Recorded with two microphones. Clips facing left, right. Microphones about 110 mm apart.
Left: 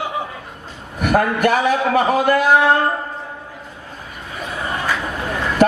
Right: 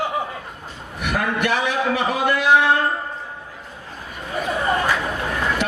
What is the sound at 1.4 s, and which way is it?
Speech, 45° left (ahead or behind).